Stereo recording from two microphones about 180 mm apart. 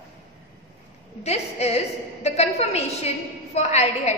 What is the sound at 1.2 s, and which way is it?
A woman's voice, 35° left (ahead or behind).